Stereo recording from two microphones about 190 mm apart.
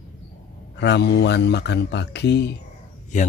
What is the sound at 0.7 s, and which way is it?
Speech, 65° left (ahead or behind).